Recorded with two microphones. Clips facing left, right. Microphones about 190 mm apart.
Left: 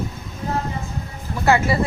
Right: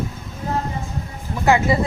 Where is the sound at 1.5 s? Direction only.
15° right (ahead or behind).